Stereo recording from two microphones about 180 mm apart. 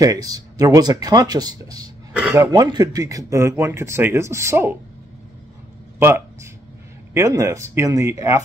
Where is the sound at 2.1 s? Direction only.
10° right (ahead or behind).